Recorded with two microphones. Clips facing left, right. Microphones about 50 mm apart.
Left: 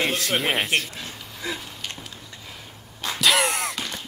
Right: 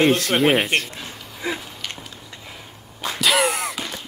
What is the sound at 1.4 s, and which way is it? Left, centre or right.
Speech, right.